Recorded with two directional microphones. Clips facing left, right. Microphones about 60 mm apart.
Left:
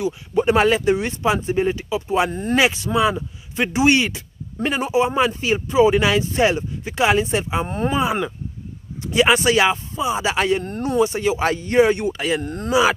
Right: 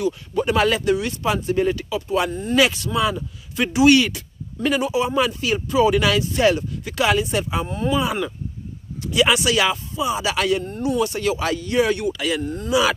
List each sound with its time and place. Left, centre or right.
0.0 s speech: left
7.6 s speech: left
10.6 s speech: left
11.0 s speech: left
11.4 s speech: left
12.4 s speech: left